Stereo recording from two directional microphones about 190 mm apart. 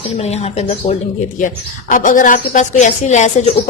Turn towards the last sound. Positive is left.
turn(degrees=35)  # may be behind; listen again after turning